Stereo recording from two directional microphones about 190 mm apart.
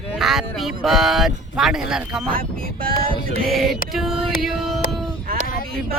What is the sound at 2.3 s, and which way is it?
Speech, 50° right (ahead or behind).